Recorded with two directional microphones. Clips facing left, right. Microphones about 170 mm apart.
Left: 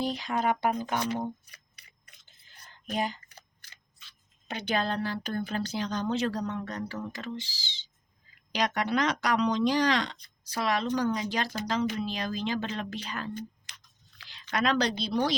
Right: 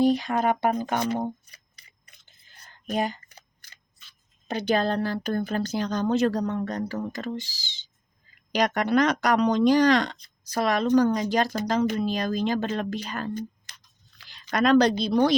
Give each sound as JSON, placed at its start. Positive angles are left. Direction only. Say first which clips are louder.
{"t": 0.0, "sound": "speech", "louder": "right 7 dB", "side_deg": -50}
{"t": 2.9, "sound": "speech", "louder": "right 4 dB", "side_deg": -50}
{"t": 4.4, "sound": "speech", "louder": "right 6 dB", "side_deg": -40}